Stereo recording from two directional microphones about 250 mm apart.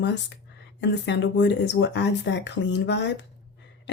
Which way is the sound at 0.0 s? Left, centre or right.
Left.